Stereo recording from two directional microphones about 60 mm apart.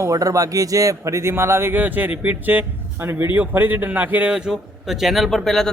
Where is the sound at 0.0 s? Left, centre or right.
Right.